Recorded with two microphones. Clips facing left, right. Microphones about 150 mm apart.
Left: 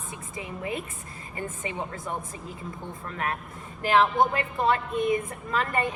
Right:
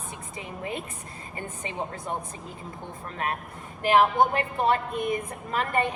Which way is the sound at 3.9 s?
25° right (ahead or behind).